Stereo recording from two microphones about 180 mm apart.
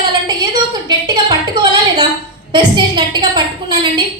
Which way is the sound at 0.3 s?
20° right (ahead or behind).